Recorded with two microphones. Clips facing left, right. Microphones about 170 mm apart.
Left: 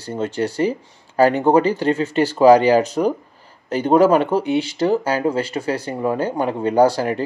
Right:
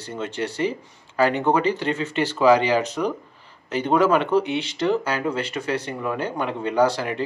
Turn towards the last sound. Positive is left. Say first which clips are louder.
# left 5 dB
turn(degrees=40)  # may be behind; listen again after turning